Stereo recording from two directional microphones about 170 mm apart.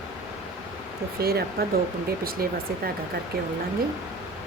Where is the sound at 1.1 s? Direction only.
65° right (ahead or behind).